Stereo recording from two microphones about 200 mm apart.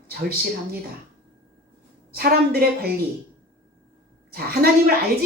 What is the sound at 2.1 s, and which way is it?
Speech, 50° right (ahead or behind).